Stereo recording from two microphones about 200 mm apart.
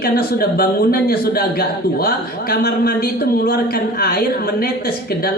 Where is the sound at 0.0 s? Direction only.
50° left (ahead or behind).